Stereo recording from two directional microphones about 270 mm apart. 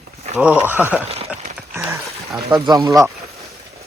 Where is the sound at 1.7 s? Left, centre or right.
Centre.